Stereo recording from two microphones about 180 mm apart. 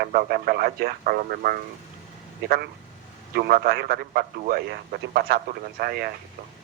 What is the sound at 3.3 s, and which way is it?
Speech, 55° right (ahead or behind).